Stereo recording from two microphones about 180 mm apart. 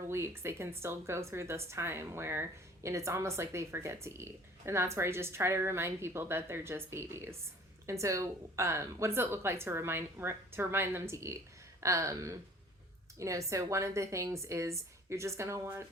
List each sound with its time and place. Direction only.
0.1 s a woman's voice: 15° right (ahead or behind)